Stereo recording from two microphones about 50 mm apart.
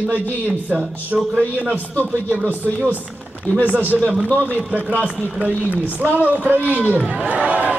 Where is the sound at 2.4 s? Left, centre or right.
Left.